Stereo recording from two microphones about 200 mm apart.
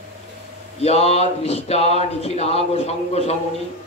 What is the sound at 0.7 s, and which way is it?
Speech, 30° left (ahead or behind).